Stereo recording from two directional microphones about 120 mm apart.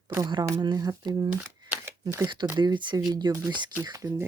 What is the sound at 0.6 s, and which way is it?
Speech, 35° right (ahead or behind).